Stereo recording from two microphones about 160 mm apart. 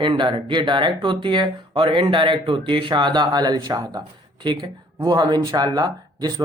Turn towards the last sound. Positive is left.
turn(degrees=-25)  # may be behind; listen again after turning